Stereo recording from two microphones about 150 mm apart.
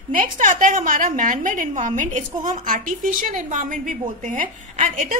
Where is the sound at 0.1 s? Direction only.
60° right (ahead or behind).